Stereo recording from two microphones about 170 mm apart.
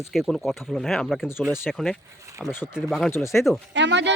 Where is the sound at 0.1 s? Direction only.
Centre (ahead or behind).